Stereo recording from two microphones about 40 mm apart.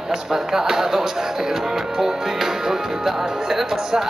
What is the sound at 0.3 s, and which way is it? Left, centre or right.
Speech, centre.